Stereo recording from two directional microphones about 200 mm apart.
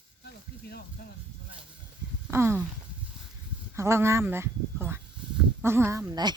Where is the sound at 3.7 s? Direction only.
15° right (ahead or behind).